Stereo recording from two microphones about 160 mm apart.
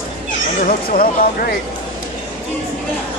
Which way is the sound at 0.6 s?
60° left (ahead or behind).